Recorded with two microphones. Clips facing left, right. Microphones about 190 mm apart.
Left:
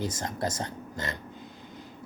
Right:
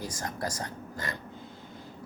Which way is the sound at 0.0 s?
25° left (ahead or behind).